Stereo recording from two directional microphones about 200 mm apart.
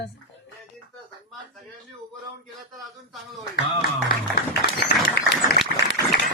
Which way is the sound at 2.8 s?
Centre (ahead or behind).